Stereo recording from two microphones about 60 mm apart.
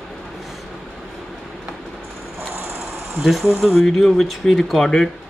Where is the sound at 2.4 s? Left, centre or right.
Right.